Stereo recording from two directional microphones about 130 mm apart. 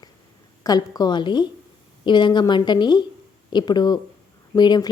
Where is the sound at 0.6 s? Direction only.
30° left (ahead or behind).